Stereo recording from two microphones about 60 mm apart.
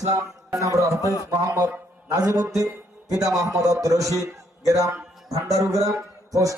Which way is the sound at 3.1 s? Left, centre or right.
Right.